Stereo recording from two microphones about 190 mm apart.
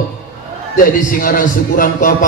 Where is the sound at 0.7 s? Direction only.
45° left (ahead or behind).